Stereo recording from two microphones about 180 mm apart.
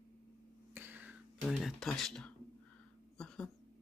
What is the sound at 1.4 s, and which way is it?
Speech, centre (ahead or behind).